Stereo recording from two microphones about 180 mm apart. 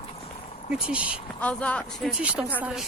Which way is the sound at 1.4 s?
5° left (ahead or behind).